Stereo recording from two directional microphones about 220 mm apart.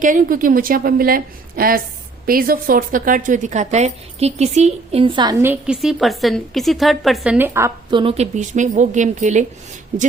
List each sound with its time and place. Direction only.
0.0 s a woman's voice: 35° right (ahead or behind)